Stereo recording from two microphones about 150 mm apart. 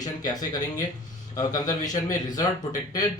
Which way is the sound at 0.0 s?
25° left (ahead or behind).